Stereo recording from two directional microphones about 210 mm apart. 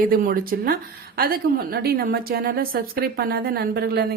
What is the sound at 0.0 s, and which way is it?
Speech, 45° right (ahead or behind).